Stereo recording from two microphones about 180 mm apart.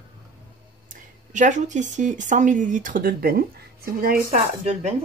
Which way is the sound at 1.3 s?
45° right (ahead or behind).